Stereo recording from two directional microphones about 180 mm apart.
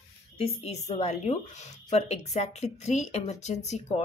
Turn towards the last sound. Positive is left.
turn(degrees=40)  # may be behind; listen again after turning